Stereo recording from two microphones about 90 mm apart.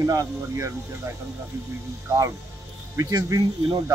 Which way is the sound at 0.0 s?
40° right (ahead or behind).